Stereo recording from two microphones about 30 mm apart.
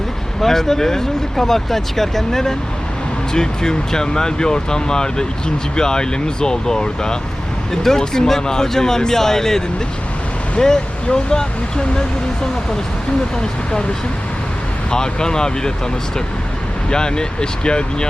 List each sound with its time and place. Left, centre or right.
0.4 s speech: centre
14.8 s speech: left
16.9 s speech: left